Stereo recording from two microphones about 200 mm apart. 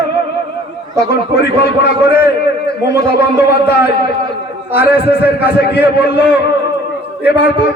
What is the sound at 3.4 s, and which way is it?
A man's voice, 10° right (ahead or behind).